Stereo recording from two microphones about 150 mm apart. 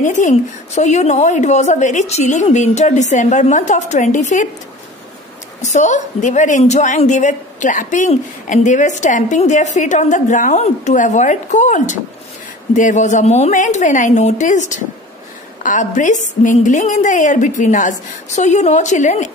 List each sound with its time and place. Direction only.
0.0 s a woman's voice: 55° left (ahead or behind)
5.6 s a woman's voice: 50° left (ahead or behind)